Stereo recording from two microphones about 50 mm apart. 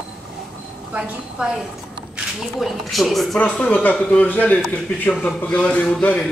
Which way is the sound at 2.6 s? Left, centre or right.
Centre.